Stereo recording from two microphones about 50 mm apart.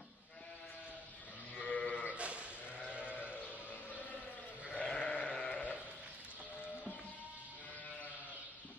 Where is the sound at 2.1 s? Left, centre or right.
Right.